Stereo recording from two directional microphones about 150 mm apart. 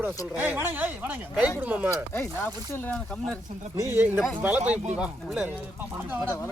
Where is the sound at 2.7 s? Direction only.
15° left (ahead or behind).